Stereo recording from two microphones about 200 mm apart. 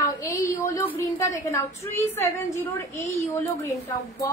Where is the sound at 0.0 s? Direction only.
15° left (ahead or behind).